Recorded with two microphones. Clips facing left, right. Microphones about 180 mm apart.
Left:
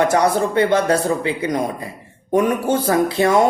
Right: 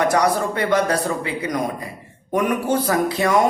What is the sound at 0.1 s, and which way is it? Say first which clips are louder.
A man's voice: left 2 dB; 25° left (ahead or behind).